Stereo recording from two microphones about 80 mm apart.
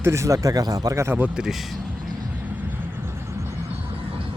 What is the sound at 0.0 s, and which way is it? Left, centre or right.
Speech, right.